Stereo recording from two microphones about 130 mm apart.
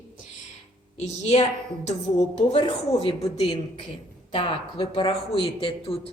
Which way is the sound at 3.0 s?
45° left (ahead or behind).